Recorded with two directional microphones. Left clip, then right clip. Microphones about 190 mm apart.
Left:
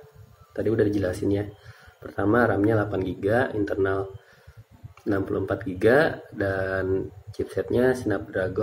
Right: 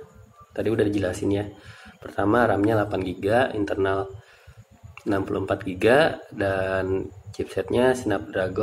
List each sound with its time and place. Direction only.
0.5 s speech: 20° left (ahead or behind)
5.1 s speech: 20° left (ahead or behind)